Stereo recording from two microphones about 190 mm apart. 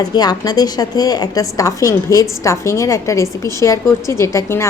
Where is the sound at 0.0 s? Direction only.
20° left (ahead or behind).